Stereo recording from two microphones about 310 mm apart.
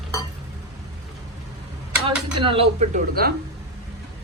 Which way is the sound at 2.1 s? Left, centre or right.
Centre.